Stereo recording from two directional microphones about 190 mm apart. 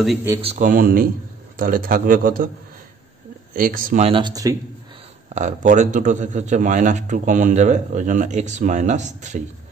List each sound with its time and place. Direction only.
0.4 s a man's voice: 35° right (ahead or behind)
3.5 s a man's voice: 45° right (ahead or behind)
4.1 s speech: 20° right (ahead or behind)
5.3 s a man's voice: 40° right (ahead or behind)